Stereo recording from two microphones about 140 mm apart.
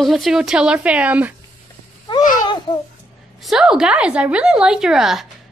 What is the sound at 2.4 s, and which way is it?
Babbling, 30° left (ahead or behind).